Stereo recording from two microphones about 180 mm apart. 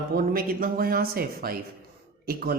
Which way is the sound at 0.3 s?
55° right (ahead or behind).